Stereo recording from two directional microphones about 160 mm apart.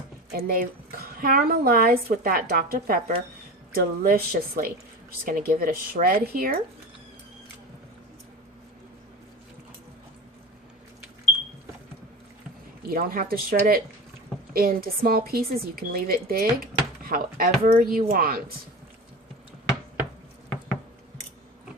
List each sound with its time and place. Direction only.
0.3 s a woman's voice: 65° right (ahead or behind)
12.9 s a woman's voice: 65° right (ahead or behind)